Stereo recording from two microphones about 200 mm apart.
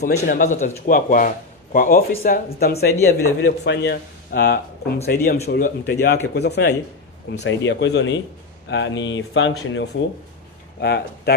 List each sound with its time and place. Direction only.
0.2 s speech: 40° left (ahead or behind); by 10.0 s 70° left (ahead or behind)
10.8 s speech: 55° left (ahead or behind)